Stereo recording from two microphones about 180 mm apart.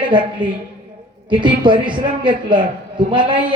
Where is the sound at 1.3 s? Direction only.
25° right (ahead or behind).